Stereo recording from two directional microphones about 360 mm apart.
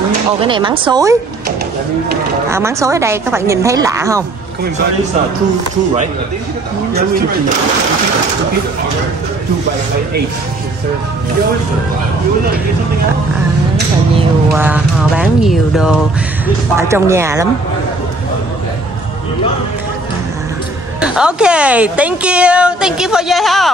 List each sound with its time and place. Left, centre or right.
0.5 s a woman's voice: centre
2.5 s a woman's voice: centre
6.9 s speech: right
14.5 s a woman's voice: centre
21.0 s a woman's voice: centre